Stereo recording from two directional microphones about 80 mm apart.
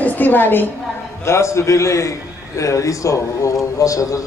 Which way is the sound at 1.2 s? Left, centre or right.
Left.